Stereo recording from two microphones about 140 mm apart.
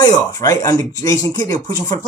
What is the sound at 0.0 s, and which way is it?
Speech, 25° left (ahead or behind).